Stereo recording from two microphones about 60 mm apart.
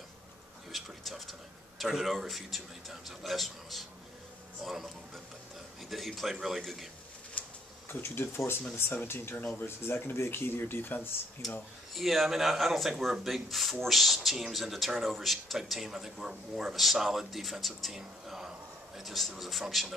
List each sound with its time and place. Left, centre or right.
0.7 s speech: centre
7.9 s speech: left
11.4 s speech: centre